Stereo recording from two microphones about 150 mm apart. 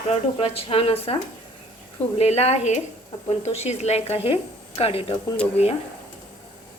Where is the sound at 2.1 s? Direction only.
45° left (ahead or behind).